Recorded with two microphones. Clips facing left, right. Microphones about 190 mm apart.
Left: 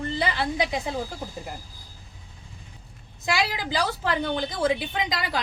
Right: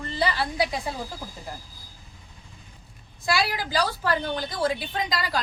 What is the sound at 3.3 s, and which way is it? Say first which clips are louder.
A woman's voice: right 1 dB; 20° left (ahead or behind).